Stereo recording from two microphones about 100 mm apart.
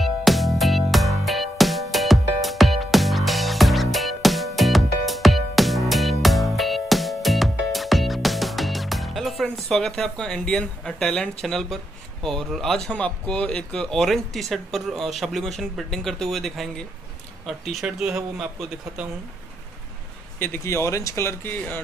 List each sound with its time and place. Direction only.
0.0 s music: centre (ahead or behind)
11.4 s a man's voice: 5° left (ahead or behind)
20.3 s speech: 20° left (ahead or behind)